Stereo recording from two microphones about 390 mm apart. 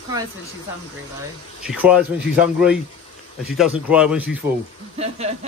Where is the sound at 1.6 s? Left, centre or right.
Centre.